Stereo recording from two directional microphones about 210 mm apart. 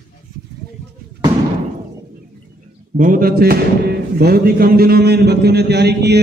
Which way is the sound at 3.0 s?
40° right (ahead or behind).